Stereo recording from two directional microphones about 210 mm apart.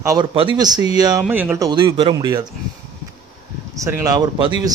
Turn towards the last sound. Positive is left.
turn(degrees=-20)  # may be behind; listen again after turning